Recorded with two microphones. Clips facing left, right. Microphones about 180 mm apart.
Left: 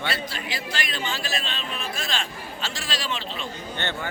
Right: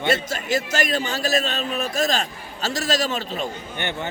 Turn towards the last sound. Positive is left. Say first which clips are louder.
# right 2 dB
turn(degrees=-15)  # may be behind; listen again after turning